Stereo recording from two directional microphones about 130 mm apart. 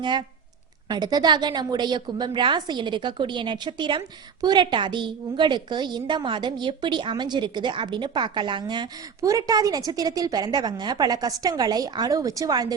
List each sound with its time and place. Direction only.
0.0 s a woman's voice: 35° right (ahead or behind)